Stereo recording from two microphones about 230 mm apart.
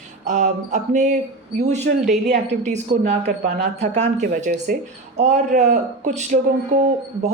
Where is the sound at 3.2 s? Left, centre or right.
Right.